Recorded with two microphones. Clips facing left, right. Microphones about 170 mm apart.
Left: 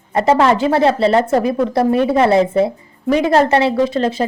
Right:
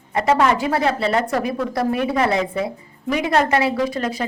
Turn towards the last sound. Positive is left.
turn(degrees=25)  # may be behind; listen again after turning